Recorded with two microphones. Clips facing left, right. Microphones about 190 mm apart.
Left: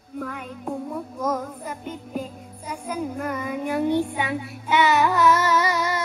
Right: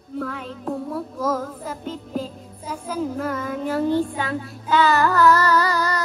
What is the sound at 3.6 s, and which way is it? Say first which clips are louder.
Child singing: right 1 dB; 15° left (ahead or behind).